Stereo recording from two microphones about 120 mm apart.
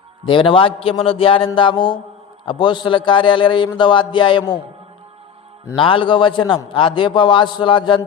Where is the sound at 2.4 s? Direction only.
45° left (ahead or behind).